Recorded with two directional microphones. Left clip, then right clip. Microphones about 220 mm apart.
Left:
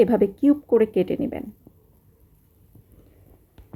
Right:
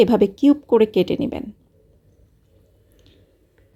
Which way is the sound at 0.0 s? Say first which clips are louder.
Right 3 dB; 30° right (ahead or behind).